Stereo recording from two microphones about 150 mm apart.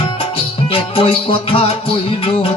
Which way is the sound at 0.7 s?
40° left (ahead or behind).